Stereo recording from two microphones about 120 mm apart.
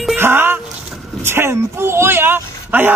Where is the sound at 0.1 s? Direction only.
20° right (ahead or behind).